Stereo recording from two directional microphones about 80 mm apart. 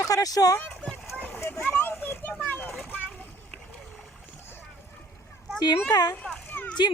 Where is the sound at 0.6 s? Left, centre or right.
Centre.